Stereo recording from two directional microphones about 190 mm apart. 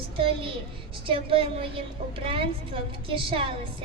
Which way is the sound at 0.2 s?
30° right (ahead or behind).